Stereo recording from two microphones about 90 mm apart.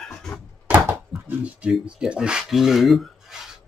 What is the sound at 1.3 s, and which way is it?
Speech, 15° right (ahead or behind).